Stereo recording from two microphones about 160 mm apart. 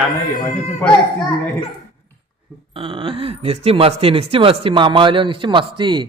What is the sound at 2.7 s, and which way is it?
Speech, 35° right (ahead or behind).